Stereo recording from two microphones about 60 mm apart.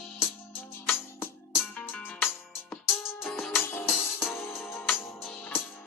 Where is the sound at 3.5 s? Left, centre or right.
Left.